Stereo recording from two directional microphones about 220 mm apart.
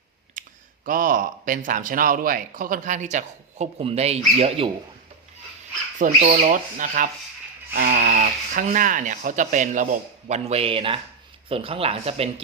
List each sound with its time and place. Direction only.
0.4 s clicking: 35° right (ahead or behind)
0.9 s speech: 40° right (ahead or behind)
6.0 s speech: 30° right (ahead or behind)